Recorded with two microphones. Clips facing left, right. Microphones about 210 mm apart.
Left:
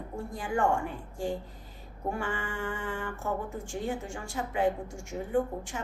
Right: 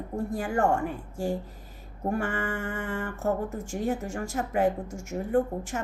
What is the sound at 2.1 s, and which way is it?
Speech, 55° right (ahead or behind).